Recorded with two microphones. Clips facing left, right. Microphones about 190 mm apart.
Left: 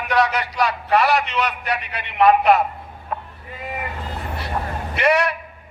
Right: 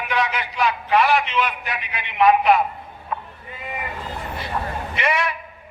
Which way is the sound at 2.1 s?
45° left (ahead or behind).